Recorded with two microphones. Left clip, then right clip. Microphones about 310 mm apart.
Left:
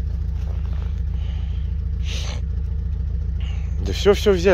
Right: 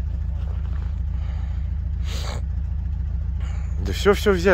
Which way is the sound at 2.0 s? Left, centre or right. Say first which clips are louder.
Left 2 dB; centre.